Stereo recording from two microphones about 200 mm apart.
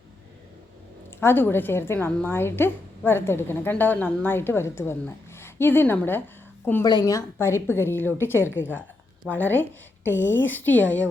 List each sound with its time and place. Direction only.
1.2 s a woman's voice: 10° left (ahead or behind)
10.0 s speech: 65° left (ahead or behind)
10.2 s a woman's voice: 10° left (ahead or behind)